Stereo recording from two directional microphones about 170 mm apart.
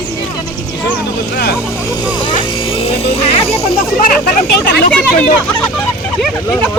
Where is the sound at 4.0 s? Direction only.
55° left (ahead or behind).